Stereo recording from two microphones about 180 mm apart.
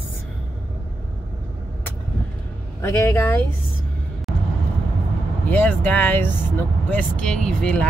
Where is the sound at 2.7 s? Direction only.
15° left (ahead or behind).